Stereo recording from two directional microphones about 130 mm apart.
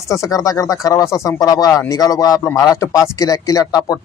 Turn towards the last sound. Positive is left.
turn(degrees=30)  # may be behind; listen again after turning